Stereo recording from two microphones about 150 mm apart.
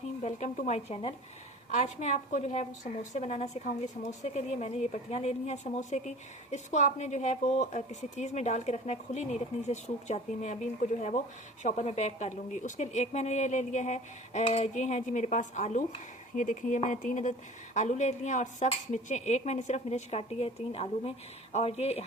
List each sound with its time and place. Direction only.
0.2 s a woman's voice: 50° left (ahead or behind)
11.6 s a woman's voice: 50° left (ahead or behind)